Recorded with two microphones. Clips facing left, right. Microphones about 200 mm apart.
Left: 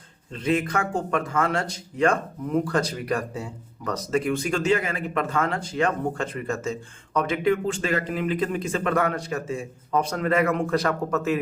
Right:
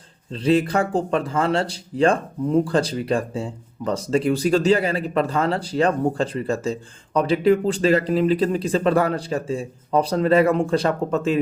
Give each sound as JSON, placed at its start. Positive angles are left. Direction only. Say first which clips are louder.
{"t": 0.3, "sound": "speech", "louder": "right 5 dB", "side_deg": -30}